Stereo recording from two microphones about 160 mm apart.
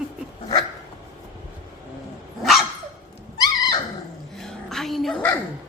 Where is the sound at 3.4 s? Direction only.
25° left (ahead or behind).